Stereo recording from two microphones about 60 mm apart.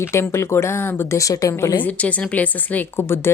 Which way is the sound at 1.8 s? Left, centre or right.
Left.